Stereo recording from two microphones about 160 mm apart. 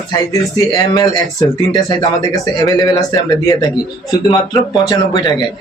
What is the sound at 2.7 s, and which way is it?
A man's voice, 20° left (ahead or behind).